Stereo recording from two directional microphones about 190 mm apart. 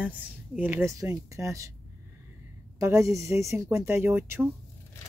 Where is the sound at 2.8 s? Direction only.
15° right (ahead or behind).